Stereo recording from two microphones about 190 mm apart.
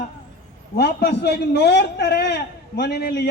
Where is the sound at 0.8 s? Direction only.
60° left (ahead or behind).